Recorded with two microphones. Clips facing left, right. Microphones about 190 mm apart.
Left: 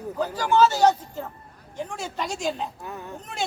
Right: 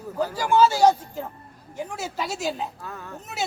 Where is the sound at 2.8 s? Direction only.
15° left (ahead or behind).